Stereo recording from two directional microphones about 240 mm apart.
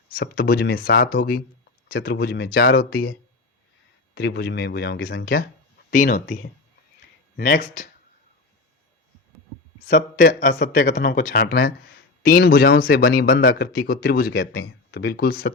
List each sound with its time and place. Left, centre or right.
0.2 s a man's voice: left
9.8 s a man's voice: left